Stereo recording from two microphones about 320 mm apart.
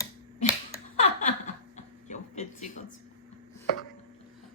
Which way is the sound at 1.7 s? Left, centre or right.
Left.